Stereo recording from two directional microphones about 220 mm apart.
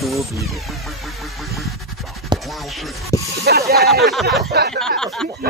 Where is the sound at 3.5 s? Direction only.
45° right (ahead or behind).